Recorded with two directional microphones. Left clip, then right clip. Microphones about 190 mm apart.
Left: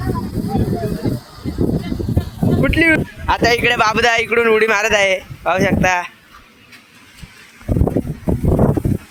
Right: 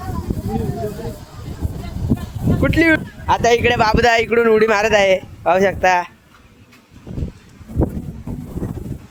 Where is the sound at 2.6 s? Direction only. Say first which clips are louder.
Even; 5° right (ahead or behind).